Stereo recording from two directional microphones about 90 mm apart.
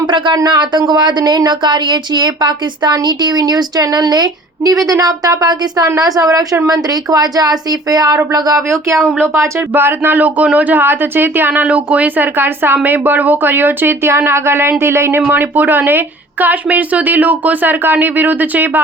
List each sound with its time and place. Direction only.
0.3 s a woman's voice: 55° right (ahead or behind); by 9.0 s 35° right (ahead or behind)
9.0 s speech: 25° right (ahead or behind)